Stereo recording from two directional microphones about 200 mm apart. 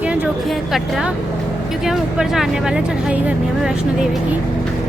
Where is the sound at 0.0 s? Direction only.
5° right (ahead or behind).